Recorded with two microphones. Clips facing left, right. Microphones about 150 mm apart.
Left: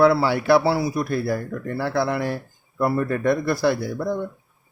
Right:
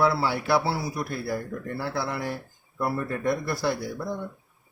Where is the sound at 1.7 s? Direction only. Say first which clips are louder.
Left 8 dB; 70° left (ahead or behind).